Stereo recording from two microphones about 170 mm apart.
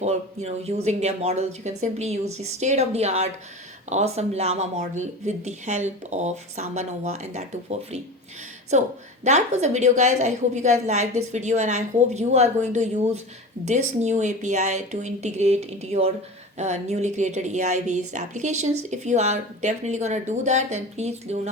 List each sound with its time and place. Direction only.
0.0 s speech: 40° right (ahead or behind)
8.7 s speech: 45° right (ahead or behind)